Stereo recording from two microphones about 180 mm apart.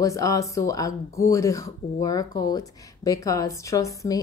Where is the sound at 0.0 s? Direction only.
20° left (ahead or behind).